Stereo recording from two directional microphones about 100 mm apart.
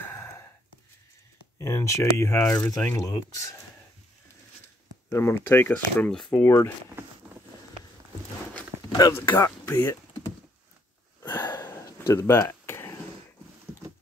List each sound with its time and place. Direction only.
0.0 s a sound: 25° left (ahead or behind)
1.6 s speech: 30° left (ahead or behind)
5.1 s speech: 25° left (ahead or behind); by 6.3 s 10° left (ahead or behind)
6.3 s speech: 25° left (ahead or behind)
9.1 s speech: 20° left (ahead or behind)
11.2 s a sound: 30° left (ahead or behind)